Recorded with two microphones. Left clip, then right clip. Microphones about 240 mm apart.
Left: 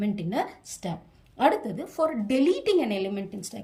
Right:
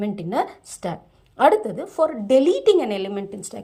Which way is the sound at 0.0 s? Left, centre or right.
Centre.